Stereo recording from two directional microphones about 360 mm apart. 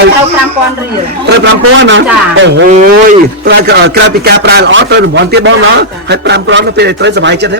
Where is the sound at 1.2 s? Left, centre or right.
Right.